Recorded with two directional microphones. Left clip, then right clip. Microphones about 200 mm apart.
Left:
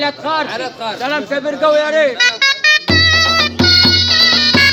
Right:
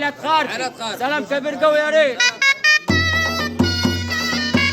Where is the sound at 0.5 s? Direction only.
35° left (ahead or behind).